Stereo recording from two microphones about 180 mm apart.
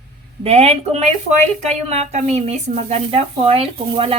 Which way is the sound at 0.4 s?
35° right (ahead or behind).